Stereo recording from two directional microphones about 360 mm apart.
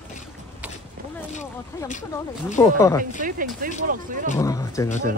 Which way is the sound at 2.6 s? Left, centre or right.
Centre.